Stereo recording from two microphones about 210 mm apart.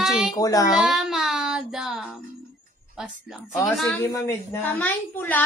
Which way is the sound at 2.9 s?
5° right (ahead or behind).